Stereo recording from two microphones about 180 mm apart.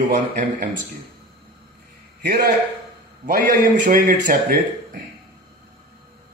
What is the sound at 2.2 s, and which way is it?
A man's voice, 55° right (ahead or behind).